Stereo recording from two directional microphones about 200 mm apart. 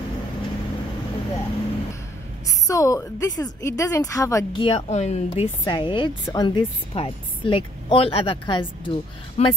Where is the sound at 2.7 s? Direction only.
15° left (ahead or behind).